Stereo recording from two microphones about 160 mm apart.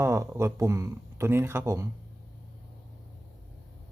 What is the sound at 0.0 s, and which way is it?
Speech, 15° right (ahead or behind).